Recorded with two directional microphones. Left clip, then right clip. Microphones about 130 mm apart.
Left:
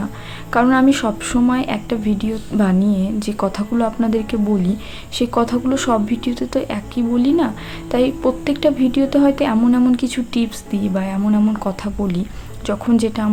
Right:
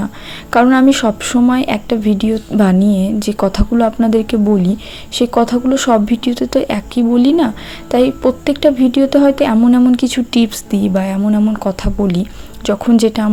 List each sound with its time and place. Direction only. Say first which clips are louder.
0.5 s a woman's voice: right 4 dB; 40° right (ahead or behind)